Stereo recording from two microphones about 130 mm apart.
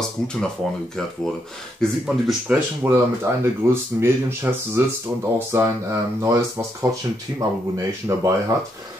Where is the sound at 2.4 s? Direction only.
15° right (ahead or behind).